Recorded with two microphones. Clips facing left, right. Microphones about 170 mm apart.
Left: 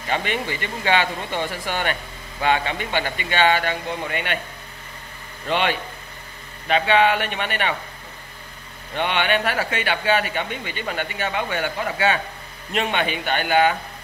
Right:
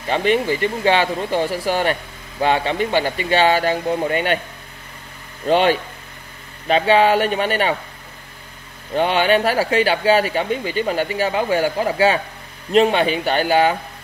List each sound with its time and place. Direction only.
0.1 s a man's voice: 40° right (ahead or behind)
5.5 s a man's voice: 40° right (ahead or behind)
8.9 s a man's voice: 40° right (ahead or behind)